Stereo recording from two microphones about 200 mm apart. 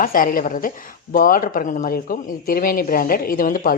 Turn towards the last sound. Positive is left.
turn(degrees=45)  # may be behind; listen again after turning